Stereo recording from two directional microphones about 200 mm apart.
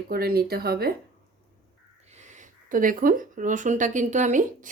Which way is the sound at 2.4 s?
40° right (ahead or behind).